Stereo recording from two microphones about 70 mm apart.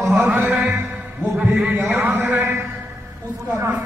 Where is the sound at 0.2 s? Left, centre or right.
Right.